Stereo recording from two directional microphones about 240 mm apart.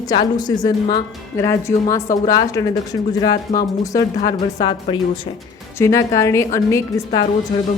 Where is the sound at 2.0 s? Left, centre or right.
Left.